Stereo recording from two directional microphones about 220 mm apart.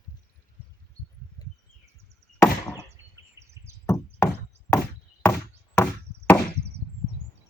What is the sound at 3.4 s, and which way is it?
Knock, 15° right (ahead or behind).